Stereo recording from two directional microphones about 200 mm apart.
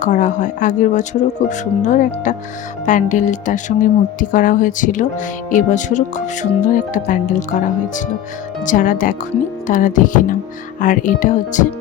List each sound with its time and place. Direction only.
0.0 s speech: 40° left (ahead or behind)